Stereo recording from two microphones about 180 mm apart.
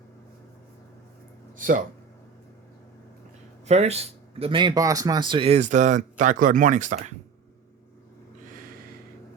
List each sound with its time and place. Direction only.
1.5 s speech: 50° right (ahead or behind)
3.7 s speech: 35° right (ahead or behind)